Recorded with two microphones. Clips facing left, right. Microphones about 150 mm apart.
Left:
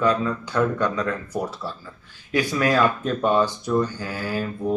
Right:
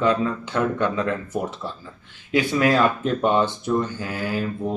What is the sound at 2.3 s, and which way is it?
Speech, 20° right (ahead or behind).